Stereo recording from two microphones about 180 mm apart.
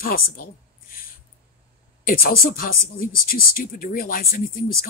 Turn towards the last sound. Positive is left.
turn(degrees=55)  # may be behind; listen again after turning